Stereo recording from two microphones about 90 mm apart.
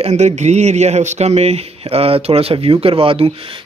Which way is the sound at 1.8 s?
90° right.